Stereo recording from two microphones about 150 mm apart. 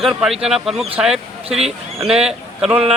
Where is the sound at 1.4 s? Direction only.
45° right (ahead or behind).